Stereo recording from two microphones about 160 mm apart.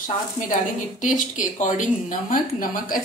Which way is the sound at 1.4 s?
55° left (ahead or behind).